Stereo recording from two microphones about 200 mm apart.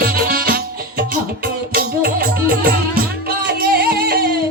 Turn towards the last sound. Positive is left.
turn(degrees=-45)  # may be behind; listen again after turning